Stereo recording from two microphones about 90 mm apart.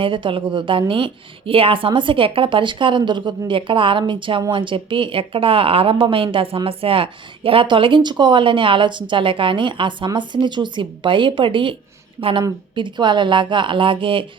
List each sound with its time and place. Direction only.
0.0 s a woman's voice: 70° right (ahead or behind)